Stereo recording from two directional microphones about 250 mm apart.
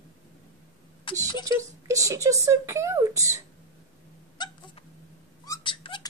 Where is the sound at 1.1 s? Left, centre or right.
Centre.